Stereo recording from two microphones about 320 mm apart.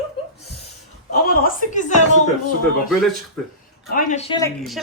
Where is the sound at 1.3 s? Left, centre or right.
Left.